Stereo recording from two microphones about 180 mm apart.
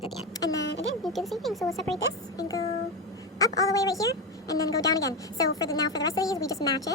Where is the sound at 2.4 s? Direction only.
20° left (ahead or behind).